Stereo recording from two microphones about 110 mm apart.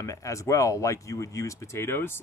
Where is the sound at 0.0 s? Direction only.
30° left (ahead or behind).